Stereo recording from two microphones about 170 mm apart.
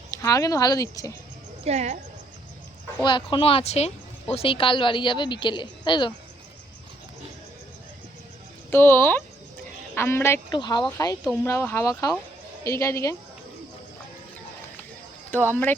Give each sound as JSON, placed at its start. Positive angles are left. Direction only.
{"t": 0.1, "sound": "speech", "side_deg": 20}
{"t": 1.6, "sound": "speech", "side_deg": -40}
{"t": 3.0, "sound": "speech", "side_deg": 25}
{"t": 8.7, "sound": "a woman's voice", "side_deg": 10}
{"t": 15.3, "sound": "a woman's voice", "side_deg": 10}